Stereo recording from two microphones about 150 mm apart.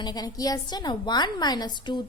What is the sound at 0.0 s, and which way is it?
A woman's voice, 25° left (ahead or behind).